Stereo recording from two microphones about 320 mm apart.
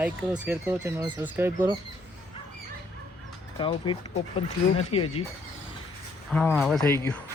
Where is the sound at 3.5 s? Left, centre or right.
Centre.